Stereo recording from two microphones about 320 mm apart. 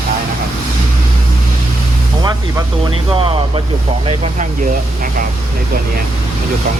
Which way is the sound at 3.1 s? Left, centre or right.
Centre.